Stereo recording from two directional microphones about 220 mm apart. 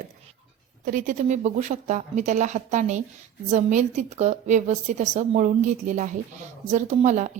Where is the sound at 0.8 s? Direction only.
40° right (ahead or behind).